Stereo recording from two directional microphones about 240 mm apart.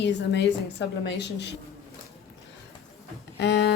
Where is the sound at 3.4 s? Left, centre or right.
Left.